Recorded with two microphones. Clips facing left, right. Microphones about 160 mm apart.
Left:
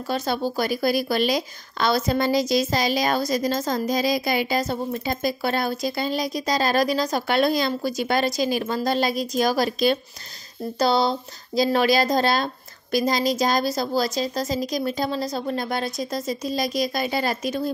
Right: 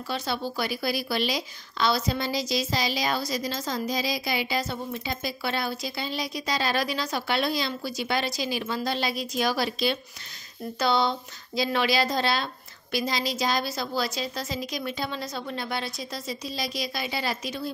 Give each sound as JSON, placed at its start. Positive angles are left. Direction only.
{"t": 0.1, "sound": "a woman's voice", "side_deg": 45}